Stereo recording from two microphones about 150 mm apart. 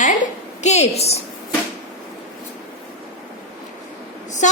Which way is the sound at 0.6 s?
45° left (ahead or behind).